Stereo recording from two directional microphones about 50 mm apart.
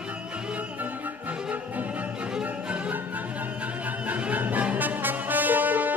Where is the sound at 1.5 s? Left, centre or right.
Right.